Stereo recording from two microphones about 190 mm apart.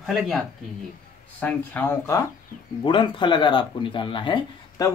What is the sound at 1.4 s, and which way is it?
Speech, 10° left (ahead or behind).